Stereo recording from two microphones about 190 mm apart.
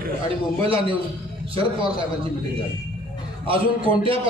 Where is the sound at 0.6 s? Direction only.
30° right (ahead or behind).